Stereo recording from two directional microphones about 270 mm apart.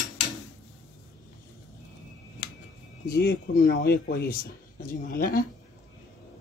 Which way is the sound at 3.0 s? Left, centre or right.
Left.